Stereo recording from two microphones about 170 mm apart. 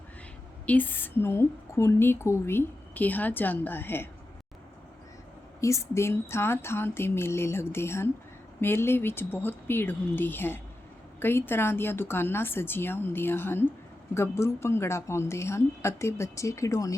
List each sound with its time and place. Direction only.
0.6 s a woman's voice: 10° left (ahead or behind)
5.5 s a woman's voice: 20° left (ahead or behind)